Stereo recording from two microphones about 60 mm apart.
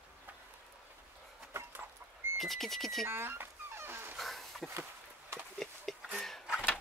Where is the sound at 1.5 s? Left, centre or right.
Right.